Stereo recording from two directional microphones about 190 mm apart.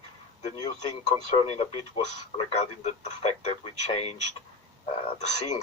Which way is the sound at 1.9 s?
30° left (ahead or behind).